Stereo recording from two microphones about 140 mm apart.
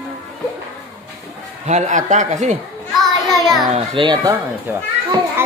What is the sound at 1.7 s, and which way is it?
Speech, 60° right (ahead or behind).